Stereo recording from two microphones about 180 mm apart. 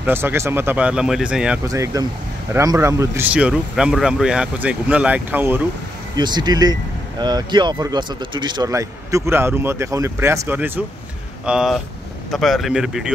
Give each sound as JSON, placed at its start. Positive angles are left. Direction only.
{"t": 0.0, "sound": "speech", "side_deg": -10}
{"t": 1.7, "sound": "speech", "side_deg": -20}
{"t": 6.1, "sound": "speech", "side_deg": -25}
{"t": 11.4, "sound": "speech", "side_deg": -5}